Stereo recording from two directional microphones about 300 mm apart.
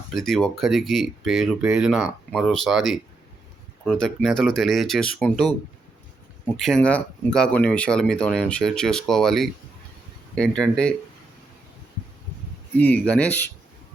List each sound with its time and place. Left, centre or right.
0.1 s speech: centre
6.6 s speech: centre
12.7 s speech: centre